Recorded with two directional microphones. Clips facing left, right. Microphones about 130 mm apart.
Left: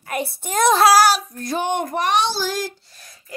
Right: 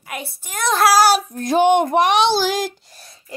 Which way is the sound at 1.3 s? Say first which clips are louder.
Right 8 dB; 90° right.